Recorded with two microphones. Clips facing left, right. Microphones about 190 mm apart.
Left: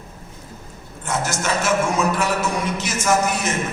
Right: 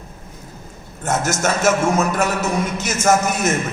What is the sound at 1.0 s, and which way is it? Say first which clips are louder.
A man's voice: right 4 dB; 45° right (ahead or behind).